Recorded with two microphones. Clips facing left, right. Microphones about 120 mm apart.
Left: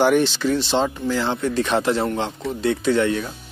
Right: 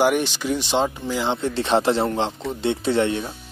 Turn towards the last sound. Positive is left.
turn(degrees=-25)  # may be behind; listen again after turning